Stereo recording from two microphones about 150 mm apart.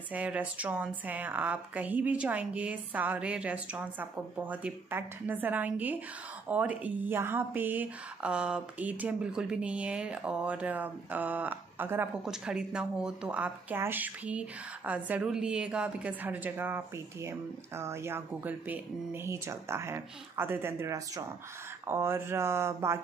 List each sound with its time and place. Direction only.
0.1 s speech: 10° right (ahead or behind)